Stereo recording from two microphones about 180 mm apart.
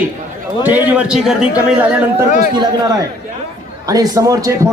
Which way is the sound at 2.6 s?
20° right (ahead or behind).